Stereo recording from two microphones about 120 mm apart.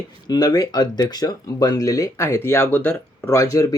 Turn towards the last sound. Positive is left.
turn(degrees=25)  # may be behind; listen again after turning